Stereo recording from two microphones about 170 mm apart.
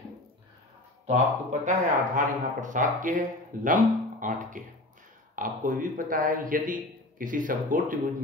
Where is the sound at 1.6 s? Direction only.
50° right (ahead or behind).